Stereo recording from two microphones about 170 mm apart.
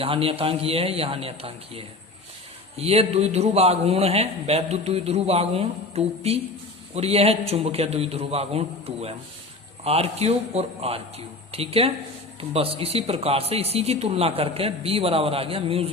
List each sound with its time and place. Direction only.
0.0 s a man's voice: 35° right (ahead or behind)